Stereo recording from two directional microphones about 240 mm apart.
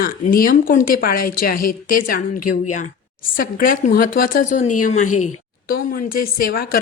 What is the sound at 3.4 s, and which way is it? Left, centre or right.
A woman's voice, left.